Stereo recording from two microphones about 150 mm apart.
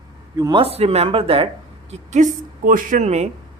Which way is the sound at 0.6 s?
40° right (ahead or behind).